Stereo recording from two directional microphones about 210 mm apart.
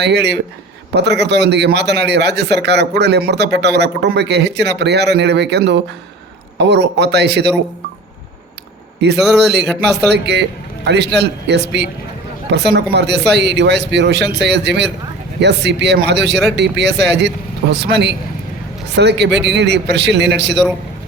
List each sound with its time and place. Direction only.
0.0 s a man's voice: 55° right (ahead or behind)
9.0 s a man's voice: 55° right (ahead or behind)
9.6 s speech: centre (ahead or behind)
10.1 s a man's voice: 55° right (ahead or behind)